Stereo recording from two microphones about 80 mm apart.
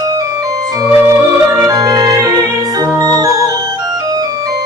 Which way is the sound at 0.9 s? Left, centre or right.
Right.